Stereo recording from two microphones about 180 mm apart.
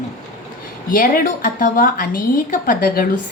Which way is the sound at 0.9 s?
50° left (ahead or behind).